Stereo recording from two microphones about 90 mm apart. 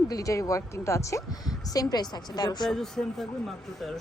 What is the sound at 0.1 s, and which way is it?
A woman's voice, 35° left (ahead or behind).